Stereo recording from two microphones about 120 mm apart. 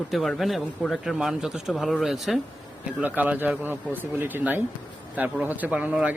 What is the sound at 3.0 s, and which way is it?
A man's voice, 15° right (ahead or behind).